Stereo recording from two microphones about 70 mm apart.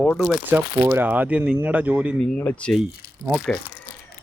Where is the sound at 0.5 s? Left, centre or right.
Right.